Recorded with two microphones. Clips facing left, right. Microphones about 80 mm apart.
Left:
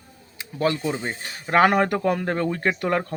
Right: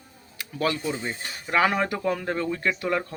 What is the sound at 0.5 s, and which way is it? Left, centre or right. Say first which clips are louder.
Speech: left 3 dB; left.